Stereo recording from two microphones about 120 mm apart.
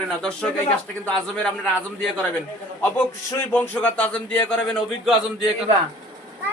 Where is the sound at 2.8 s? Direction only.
15° left (ahead or behind); by 5.7 s centre (ahead or behind).